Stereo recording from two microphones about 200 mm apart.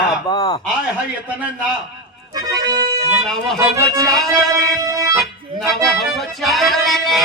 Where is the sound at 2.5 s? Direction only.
15° right (ahead or behind).